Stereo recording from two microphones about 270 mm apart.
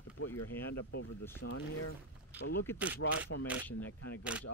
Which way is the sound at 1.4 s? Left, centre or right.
Left.